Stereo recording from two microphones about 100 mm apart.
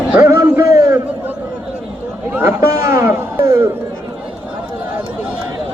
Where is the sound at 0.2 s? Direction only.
30° right (ahead or behind).